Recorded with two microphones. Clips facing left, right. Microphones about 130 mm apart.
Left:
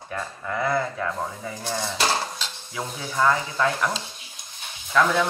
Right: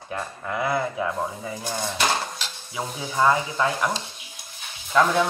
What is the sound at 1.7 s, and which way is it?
Cutlery, centre (ahead or behind).